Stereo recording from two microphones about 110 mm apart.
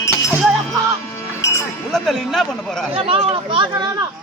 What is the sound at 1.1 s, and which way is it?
Music, 25° left (ahead or behind).